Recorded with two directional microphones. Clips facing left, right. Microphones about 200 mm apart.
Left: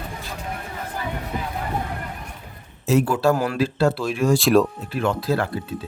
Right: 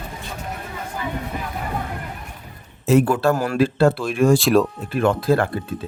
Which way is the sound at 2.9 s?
55° right (ahead or behind).